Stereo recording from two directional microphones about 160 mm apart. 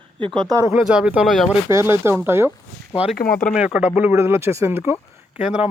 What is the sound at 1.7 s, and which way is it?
Speech, 15° right (ahead or behind).